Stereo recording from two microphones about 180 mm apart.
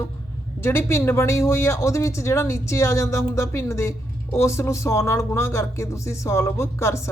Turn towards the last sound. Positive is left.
turn(degrees=15)  # may be behind; listen again after turning